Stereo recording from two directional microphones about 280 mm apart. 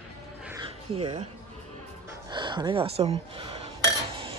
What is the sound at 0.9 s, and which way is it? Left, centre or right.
Speech, centre.